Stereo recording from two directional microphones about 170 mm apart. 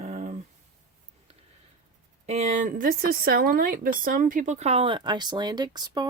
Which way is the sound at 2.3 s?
40° right (ahead or behind).